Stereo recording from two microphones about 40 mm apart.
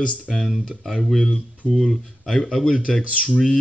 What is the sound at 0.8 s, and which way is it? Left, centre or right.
Speech, centre.